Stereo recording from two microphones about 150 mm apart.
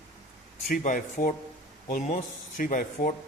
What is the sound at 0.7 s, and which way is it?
Speech, 60° left (ahead or behind).